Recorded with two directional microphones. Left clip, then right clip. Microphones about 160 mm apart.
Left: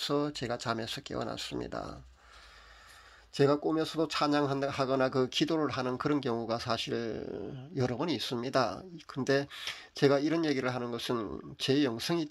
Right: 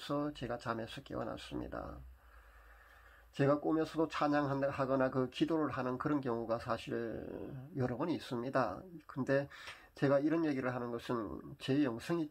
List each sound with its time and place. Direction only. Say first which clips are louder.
0.0 s speech: left 7 dB; 30° left (ahead or behind)
3.3 s speech: left 5 dB; 35° left (ahead or behind)